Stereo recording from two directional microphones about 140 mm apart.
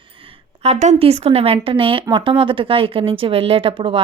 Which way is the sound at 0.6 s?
55° right (ahead or behind).